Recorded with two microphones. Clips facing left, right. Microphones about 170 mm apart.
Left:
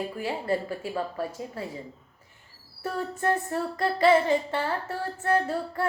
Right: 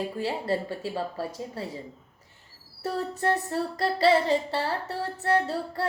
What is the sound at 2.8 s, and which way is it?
Female singing, 35° right (ahead or behind).